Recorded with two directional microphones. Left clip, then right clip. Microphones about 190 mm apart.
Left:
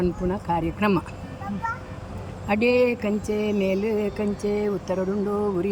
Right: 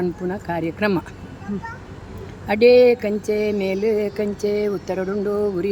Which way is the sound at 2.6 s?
15° right (ahead or behind).